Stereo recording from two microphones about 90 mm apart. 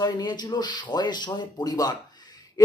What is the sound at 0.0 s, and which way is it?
A woman's voice, 50° left (ahead or behind).